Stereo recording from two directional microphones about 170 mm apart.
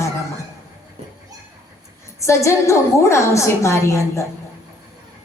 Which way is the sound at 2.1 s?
15° left (ahead or behind).